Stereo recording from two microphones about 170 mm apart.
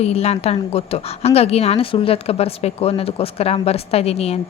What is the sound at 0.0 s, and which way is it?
A woman's voice, 40° left (ahead or behind).